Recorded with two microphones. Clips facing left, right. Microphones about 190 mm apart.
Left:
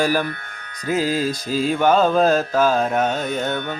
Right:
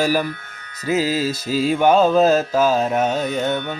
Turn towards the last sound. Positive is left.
turn(degrees=-10)  # may be behind; listen again after turning